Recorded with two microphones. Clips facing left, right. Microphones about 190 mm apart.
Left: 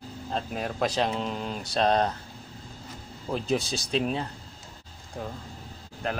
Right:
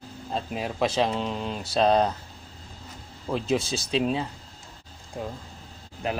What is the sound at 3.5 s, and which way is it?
Speech, 25° right (ahead or behind).